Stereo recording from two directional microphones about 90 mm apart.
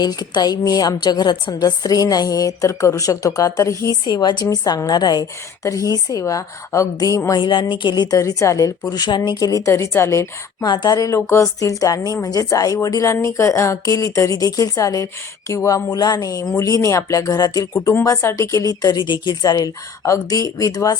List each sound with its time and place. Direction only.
0.0 s a woman's voice: 50° left (ahead or behind); by 3.9 s 35° left (ahead or behind)
4.0 s a woman's voice: 50° left (ahead or behind)
4.4 s a woman's voice: 40° left (ahead or behind)
7.3 s a woman's voice: 55° left (ahead or behind); by 10.7 s 35° left (ahead or behind)
10.7 s a woman's voice: 50° left (ahead or behind)
18.0 s a woman's voice: 30° left (ahead or behind); by 19.4 s 60° left (ahead or behind)
19.4 s a woman's voice: 45° left (ahead or behind)